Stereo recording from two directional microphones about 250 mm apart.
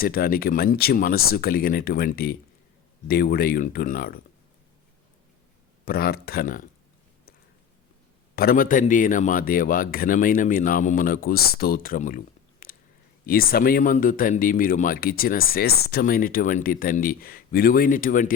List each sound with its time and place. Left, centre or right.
0.0 s speech: left
5.8 s speech: left
8.4 s speech: left